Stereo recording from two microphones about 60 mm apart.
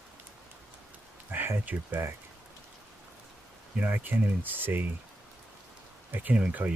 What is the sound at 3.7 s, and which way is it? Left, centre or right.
Speech, right.